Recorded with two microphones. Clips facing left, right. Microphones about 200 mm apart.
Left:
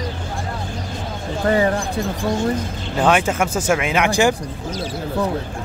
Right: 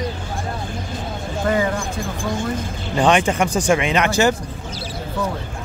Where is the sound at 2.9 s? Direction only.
5° left (ahead or behind).